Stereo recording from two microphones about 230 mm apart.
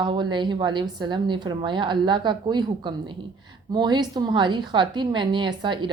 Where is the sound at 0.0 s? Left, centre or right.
Centre.